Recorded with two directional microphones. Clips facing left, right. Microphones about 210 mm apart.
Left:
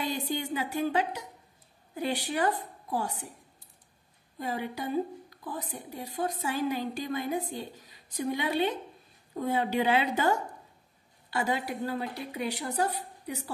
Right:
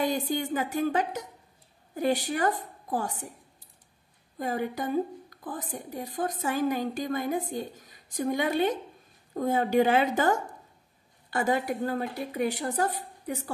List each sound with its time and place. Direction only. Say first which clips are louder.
0.0 s a woman's voice: right 4 dB; 50° right (ahead or behind)
4.4 s a woman's voice: right 4 dB; 50° right (ahead or behind)